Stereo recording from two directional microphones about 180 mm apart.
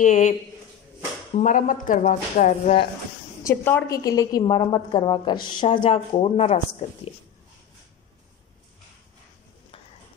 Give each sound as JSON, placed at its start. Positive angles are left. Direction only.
{"t": 0.0, "sound": "a man's voice", "side_deg": 40}
{"t": 1.4, "sound": "speech", "side_deg": 45}
{"t": 3.4, "sound": "a woman's voice", "side_deg": 15}